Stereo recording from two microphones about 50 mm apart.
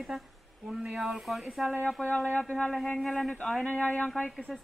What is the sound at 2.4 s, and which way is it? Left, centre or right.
Speech, centre.